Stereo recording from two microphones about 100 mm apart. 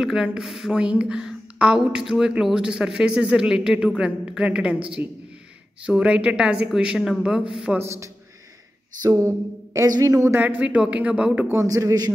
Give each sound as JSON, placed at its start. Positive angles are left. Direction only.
{"t": 0.0, "sound": "a woman's voice", "side_deg": -10}
{"t": 7.8, "sound": "a man's voice", "side_deg": -30}
{"t": 10.3, "sound": "a woman's voice", "side_deg": -15}
{"t": 11.5, "sound": "a man's voice", "side_deg": -35}